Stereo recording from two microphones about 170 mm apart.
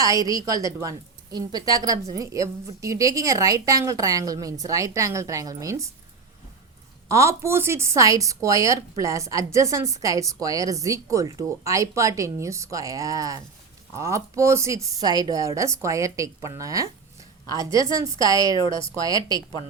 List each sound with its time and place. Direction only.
0.0 s speech: 20° right (ahead or behind)
7.1 s speech: 15° right (ahead or behind)